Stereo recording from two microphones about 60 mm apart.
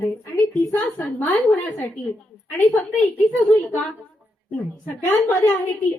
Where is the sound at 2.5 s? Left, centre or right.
Left.